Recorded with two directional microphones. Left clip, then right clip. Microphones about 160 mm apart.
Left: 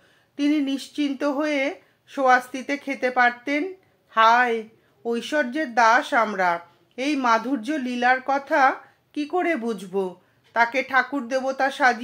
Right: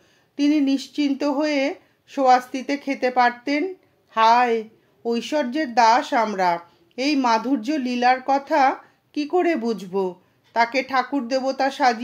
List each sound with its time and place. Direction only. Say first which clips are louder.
0.4 s speech: right 3 dB; 35° right (ahead or behind)